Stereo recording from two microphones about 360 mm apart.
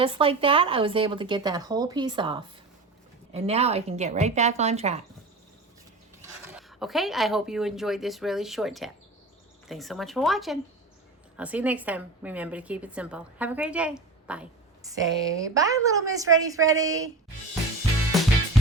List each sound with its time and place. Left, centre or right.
0.0 s speech: centre
6.5 s a woman's voice: centre